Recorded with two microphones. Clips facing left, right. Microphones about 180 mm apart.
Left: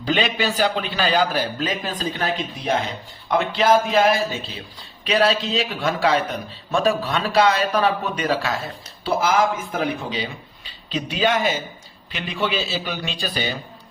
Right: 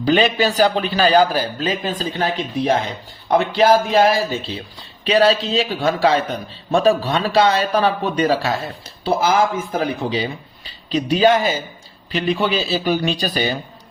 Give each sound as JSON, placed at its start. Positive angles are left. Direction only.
{"t": 0.0, "sound": "a man's voice", "side_deg": -40}
{"t": 9.7, "sound": "a man's voice", "side_deg": -35}